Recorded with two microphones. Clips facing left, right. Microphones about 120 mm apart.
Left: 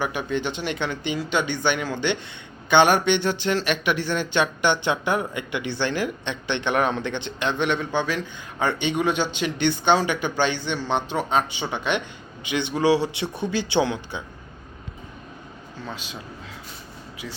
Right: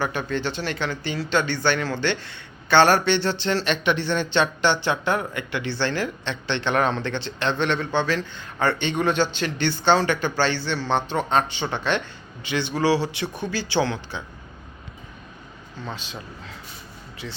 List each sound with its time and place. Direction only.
0.0 s a man's voice: 15° left (ahead or behind)
15.8 s speech: 5° left (ahead or behind)